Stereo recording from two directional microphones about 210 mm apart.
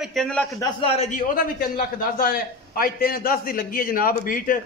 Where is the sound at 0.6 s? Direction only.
25° left (ahead or behind).